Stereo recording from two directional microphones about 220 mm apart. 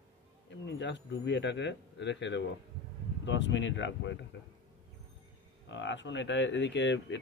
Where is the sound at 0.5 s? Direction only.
55° left (ahead or behind).